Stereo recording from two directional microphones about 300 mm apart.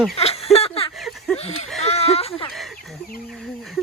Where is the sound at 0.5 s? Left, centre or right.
Centre.